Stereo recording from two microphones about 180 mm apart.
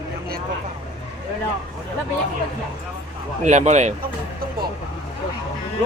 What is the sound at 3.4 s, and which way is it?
Speech, 40° right (ahead or behind).